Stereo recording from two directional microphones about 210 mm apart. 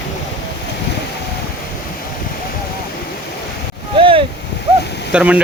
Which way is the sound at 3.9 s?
25° right (ahead or behind).